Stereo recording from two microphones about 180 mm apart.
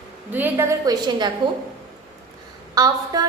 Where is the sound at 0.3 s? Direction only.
15° right (ahead or behind).